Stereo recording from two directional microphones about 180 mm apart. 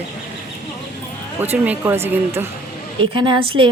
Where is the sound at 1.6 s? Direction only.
10° right (ahead or behind).